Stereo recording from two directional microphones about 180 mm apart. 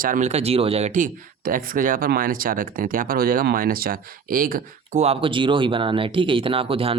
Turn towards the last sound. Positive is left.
turn(degrees=-30)  # may be behind; listen again after turning